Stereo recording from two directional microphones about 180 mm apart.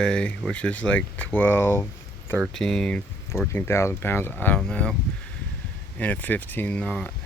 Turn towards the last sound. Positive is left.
turn(degrees=5)  # may be behind; listen again after turning